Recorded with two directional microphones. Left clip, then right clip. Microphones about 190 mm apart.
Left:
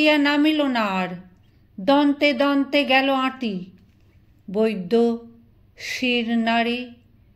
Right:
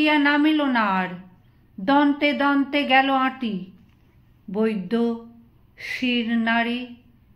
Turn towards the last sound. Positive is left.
turn(degrees=40)  # may be behind; listen again after turning